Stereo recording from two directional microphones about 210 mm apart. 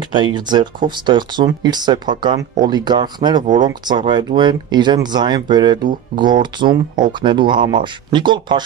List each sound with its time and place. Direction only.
0.1 s speech: 20° right (ahead or behind)